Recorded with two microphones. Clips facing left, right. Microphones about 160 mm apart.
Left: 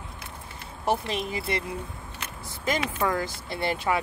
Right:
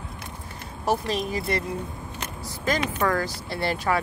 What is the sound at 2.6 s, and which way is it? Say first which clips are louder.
Speech: right 2 dB; 20° left (ahead or behind).